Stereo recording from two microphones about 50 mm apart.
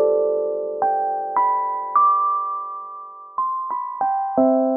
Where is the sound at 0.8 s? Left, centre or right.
Centre.